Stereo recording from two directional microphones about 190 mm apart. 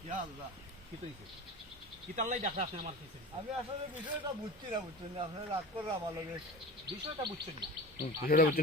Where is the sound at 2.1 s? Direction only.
40° right (ahead or behind).